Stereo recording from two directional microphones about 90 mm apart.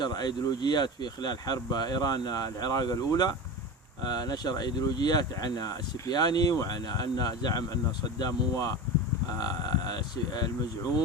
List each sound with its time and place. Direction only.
0.0 s speech: 50° left (ahead or behind)